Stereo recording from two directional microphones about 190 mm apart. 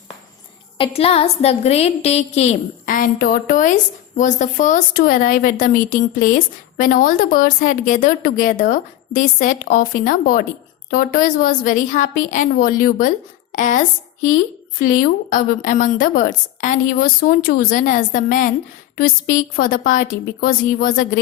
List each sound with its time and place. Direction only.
0.8 s a woman's voice: 30° left (ahead or behind)